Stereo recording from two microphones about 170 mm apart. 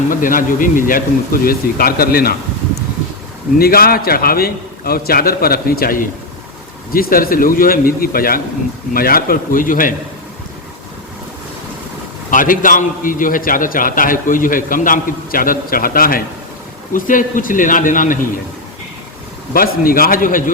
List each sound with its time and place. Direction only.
0.1 s a man's voice: 55° left (ahead or behind)
3.6 s a man's voice: 60° left (ahead or behind)
12.3 s a man's voice: 50° left (ahead or behind)
19.5 s a man's voice: 60° left (ahead or behind)